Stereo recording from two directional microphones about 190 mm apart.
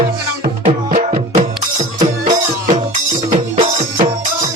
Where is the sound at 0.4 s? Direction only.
35° right (ahead or behind).